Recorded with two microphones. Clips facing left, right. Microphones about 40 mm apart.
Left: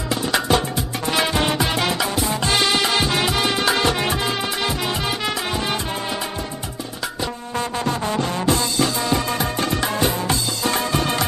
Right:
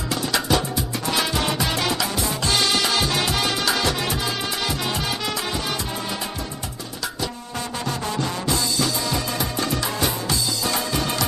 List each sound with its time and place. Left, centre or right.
0.1 s music: left
7.2 s music: left